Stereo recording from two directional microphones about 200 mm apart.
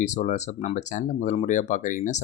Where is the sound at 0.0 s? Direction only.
35° left (ahead or behind).